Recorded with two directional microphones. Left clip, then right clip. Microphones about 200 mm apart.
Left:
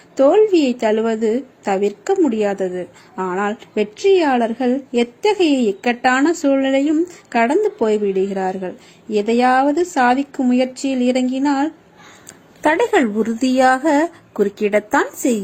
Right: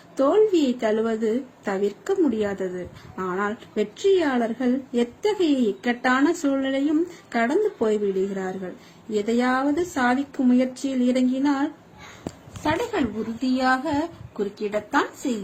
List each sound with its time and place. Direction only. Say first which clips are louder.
0.2 s a woman's voice: left 6 dB; 15° left (ahead or behind)
12.6 s speech: left 9 dB; 45° left (ahead or behind)